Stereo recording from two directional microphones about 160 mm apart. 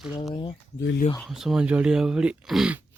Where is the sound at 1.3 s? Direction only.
5° right (ahead or behind).